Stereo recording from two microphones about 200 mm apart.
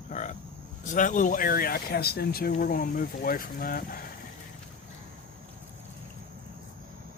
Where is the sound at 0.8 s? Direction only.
40° left (ahead or behind).